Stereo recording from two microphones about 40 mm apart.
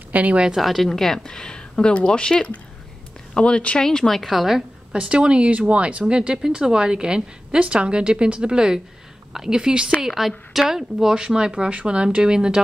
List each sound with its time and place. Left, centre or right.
0.1 s speech: right
0.6 s a woman's voice: centre
0.8 s speech: centre; by 3.8 s left
3.8 s a woman's voice: centre
4.9 s a woman's voice: right
10.0 s speech: centre